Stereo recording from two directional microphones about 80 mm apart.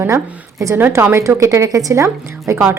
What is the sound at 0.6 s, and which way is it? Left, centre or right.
Speech, right.